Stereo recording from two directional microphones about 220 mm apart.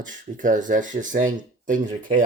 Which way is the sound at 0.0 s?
35° right (ahead or behind).